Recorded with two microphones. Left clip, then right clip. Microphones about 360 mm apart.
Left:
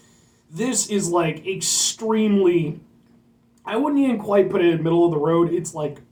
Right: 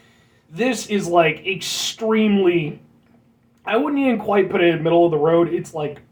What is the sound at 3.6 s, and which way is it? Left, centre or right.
Speech, centre.